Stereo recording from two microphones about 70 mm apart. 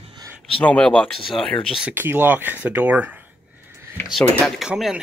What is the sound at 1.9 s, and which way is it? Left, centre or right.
Speech, right.